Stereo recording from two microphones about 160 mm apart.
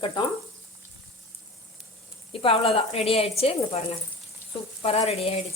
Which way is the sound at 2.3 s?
35° left (ahead or behind).